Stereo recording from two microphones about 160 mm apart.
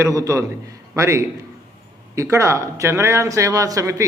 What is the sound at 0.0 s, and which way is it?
A man's voice, 20° right (ahead or behind).